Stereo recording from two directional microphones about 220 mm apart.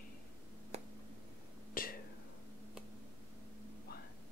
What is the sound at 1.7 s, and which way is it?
Whispering, 40° left (ahead or behind).